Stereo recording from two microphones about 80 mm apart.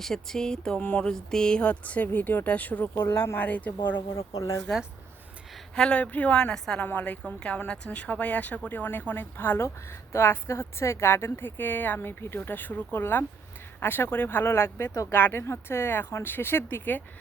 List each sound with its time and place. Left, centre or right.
0.0 s a woman's voice: centre
4.1 s speech: left
5.7 s a woman's voice: centre; by 17.0 s left